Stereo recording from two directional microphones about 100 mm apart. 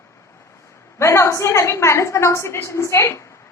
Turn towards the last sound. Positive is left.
turn(degrees=30)  # may be behind; listen again after turning